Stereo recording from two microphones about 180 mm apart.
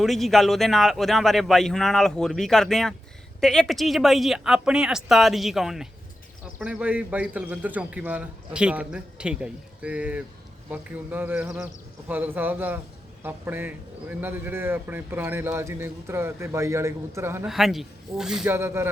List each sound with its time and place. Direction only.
0.0 s a man's voice: centre (ahead or behind)
17.5 s a man's voice: centre (ahead or behind)
18.5 s a man's voice: 15° right (ahead or behind)